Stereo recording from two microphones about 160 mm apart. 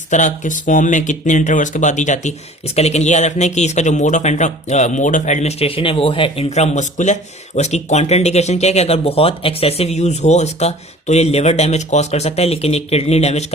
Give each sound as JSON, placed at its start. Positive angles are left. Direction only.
{"t": 0.1, "sound": "speech", "side_deg": 50}